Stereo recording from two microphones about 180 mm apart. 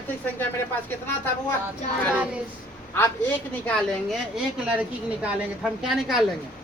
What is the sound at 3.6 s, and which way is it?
A woman's voice, 5° left (ahead or behind).